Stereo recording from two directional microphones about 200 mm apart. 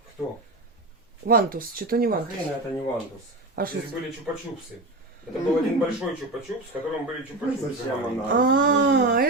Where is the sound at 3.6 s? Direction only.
50° right (ahead or behind).